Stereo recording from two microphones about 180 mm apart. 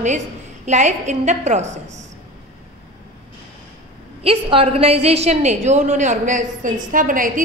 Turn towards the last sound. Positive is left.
turn(degrees=-50)  # may be behind; listen again after turning